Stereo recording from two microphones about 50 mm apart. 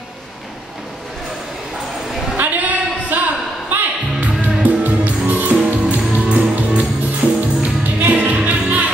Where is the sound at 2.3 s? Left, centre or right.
Right.